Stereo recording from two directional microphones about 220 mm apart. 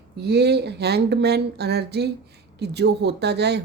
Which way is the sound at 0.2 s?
50° right (ahead or behind).